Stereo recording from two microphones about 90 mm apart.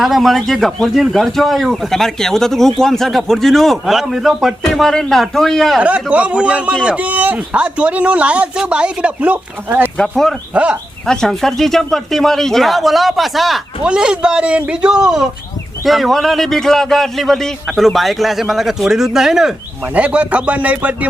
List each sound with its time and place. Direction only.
0.0 s a man's voice: centre (ahead or behind)
5.8 s a man's voice: 15° right (ahead or behind)
10.0 s a man's voice: 5° left (ahead or behind)
10.5 s a man's voice: 15° right (ahead or behind)
11.0 s a man's voice: 5° left (ahead or behind); by 21.1 s 15° right (ahead or behind)